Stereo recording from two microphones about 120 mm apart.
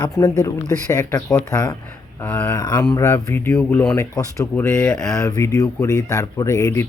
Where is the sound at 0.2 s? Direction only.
25° left (ahead or behind).